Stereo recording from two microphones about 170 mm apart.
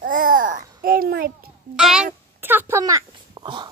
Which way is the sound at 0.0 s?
55° right (ahead or behind).